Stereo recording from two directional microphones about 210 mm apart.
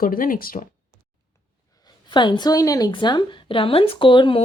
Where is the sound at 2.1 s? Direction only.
20° left (ahead or behind).